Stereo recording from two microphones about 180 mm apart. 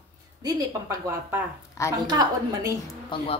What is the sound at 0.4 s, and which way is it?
A woman's voice, 20° right (ahead or behind).